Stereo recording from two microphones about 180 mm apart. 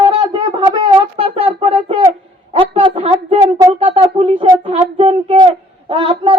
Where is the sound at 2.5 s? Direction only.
30° right (ahead or behind).